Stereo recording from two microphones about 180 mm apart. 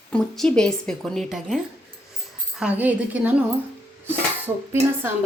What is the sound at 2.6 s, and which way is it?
Speech, 5° right (ahead or behind).